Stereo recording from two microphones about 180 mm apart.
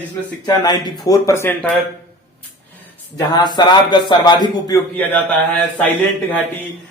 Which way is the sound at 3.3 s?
25° left (ahead or behind).